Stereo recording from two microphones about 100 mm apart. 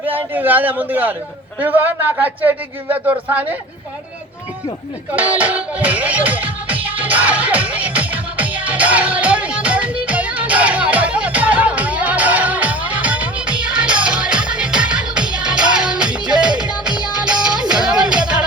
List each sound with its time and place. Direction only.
0.1 s a man's voice: 20° right (ahead or behind)
5.1 s music: 15° right (ahead or behind)